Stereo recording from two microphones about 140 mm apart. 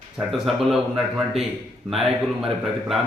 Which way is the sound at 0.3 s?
Centre (ahead or behind).